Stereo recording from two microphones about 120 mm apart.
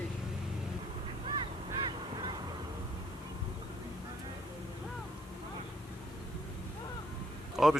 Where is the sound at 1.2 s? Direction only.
45° right (ahead or behind).